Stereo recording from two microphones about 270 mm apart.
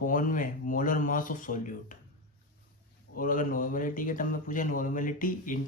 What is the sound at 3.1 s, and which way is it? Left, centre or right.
Speech, left.